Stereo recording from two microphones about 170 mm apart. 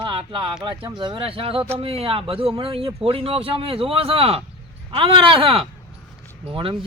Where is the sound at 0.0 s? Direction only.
30° right (ahead or behind).